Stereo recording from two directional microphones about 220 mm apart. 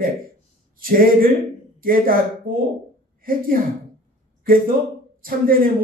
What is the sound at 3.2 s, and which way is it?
Speech, 40° right (ahead or behind).